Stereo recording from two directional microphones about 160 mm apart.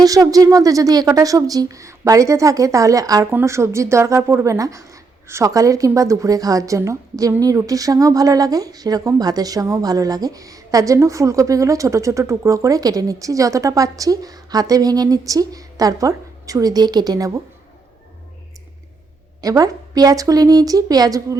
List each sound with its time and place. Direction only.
0.0 s a woman's voice: 20° right (ahead or behind)
19.4 s a woman's voice: 20° right (ahead or behind)